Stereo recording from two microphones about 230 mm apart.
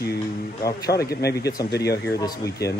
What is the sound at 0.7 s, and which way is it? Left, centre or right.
Speech, centre.